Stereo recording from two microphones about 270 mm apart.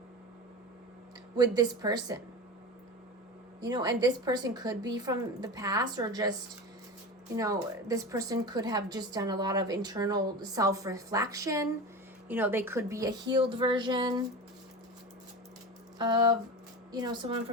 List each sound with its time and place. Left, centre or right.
1.4 s a woman's voice: centre
3.6 s a woman's voice: centre
7.3 s a woman's voice: centre
16.0 s a woman's voice: centre